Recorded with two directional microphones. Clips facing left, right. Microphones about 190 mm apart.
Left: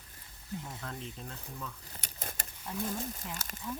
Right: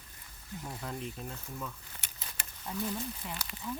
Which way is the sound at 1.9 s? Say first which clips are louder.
Left 5 dB; 45° left (ahead or behind).